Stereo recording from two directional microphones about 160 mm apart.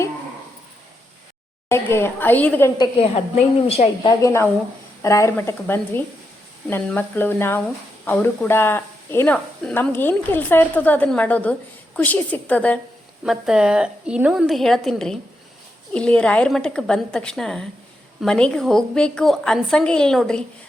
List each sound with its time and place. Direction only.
1.7 s a woman's voice: 15° left (ahead or behind)
2.7 s a woman's voice: 25° left (ahead or behind)
3.3 s a woman's voice: 45° left (ahead or behind)
4.0 s a woman's voice: 20° left (ahead or behind)
13.2 s a woman's voice: 5° right (ahead or behind)